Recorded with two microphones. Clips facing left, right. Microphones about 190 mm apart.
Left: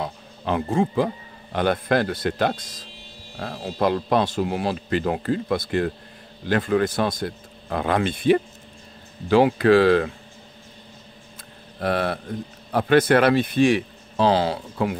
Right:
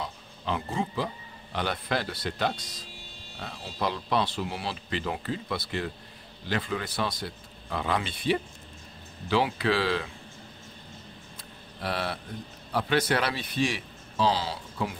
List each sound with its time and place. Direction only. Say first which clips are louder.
0.0 s speech: left 6 dB; 55° left (ahead or behind)
11.8 s a man's voice: left 8 dB; 50° left (ahead or behind)